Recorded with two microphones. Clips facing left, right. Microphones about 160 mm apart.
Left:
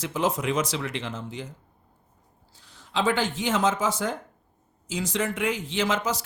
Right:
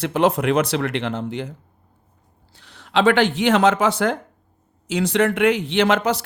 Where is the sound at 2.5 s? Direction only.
70° right (ahead or behind).